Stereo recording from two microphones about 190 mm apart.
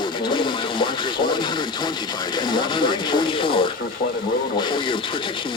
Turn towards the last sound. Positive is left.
turn(degrees=25)  # may be behind; listen again after turning